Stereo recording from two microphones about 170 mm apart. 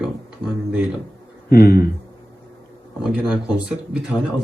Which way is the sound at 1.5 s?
65° left (ahead or behind).